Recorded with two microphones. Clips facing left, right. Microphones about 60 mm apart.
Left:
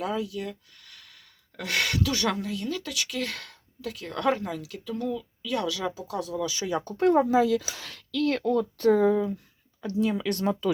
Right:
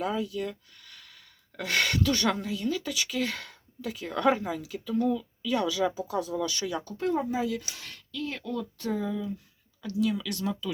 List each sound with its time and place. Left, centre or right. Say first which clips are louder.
0.0 s speech: even; centre
6.6 s speech: left 3 dB; left
6.9 s speech: left 9 dB; left
8.1 s speech: left 9 dB; left
8.4 s speech: left 9 dB; left
9.8 s speech: left 2 dB; left